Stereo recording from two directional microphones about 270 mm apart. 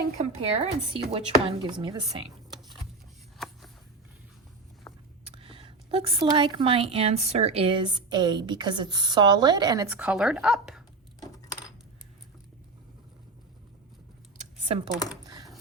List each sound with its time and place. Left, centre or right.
0.0 s a woman's voice: right
3.3 s a sound: centre
5.3 s a woman's voice: centre
14.7 s a woman's voice: right